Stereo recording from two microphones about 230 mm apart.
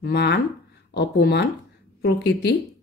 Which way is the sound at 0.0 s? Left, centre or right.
Left.